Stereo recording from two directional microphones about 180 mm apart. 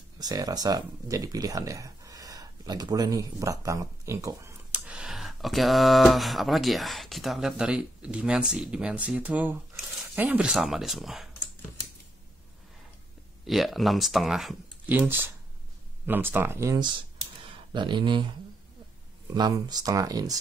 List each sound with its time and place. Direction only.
0.2 s speech: 20° right (ahead or behind); by 11.2 s centre (ahead or behind)
13.5 s speech: centre (ahead or behind); by 18.3 s 25° right (ahead or behind)
19.3 s speech: 20° right (ahead or behind)